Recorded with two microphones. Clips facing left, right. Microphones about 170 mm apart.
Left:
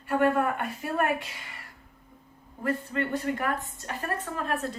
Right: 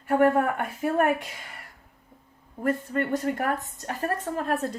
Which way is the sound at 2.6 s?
45° right (ahead or behind).